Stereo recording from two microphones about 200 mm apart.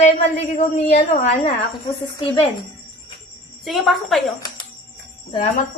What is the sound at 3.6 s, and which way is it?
Speech, centre (ahead or behind).